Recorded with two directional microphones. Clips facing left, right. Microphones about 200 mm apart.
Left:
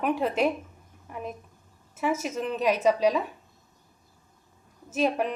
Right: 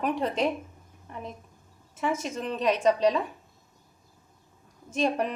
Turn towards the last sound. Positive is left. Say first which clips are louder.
# left 1 dB
turn(degrees=5)  # may be behind; listen again after turning